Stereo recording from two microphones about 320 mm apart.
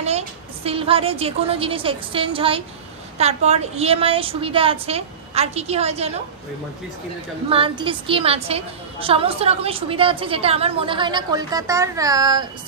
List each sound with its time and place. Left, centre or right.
0.7 s a woman's voice: centre
7.4 s a woman's voice: centre